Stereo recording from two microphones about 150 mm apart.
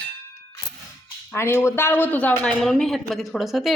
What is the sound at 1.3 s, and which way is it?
Speech, 15° left (ahead or behind).